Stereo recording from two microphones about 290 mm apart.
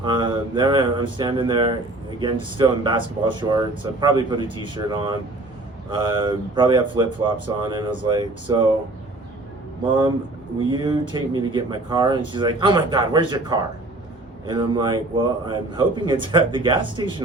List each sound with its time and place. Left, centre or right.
0.0 s speech: centre
10.6 s speech: centre